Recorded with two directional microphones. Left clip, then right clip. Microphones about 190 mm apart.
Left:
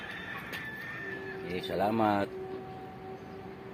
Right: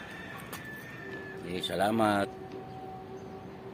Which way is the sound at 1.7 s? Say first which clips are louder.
Right 1 dB; centre (ahead or behind).